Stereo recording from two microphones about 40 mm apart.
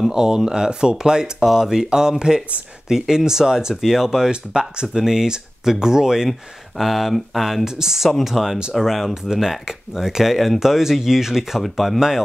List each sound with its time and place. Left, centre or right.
0.0 s speech: centre
4.3 s speech: right
6.8 s speech: centre
7.6 s speech: centre
9.1 s speech: centre
11.6 s speech: centre